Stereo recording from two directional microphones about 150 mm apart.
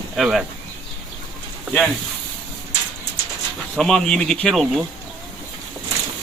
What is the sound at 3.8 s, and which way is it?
Speech, 5° left (ahead or behind).